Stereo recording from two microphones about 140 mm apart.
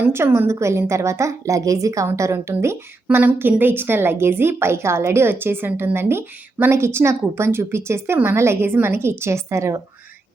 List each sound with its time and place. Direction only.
0.0 s a woman's voice: 15° right (ahead or behind)